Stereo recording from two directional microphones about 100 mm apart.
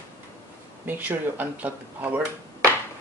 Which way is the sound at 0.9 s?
15° right (ahead or behind).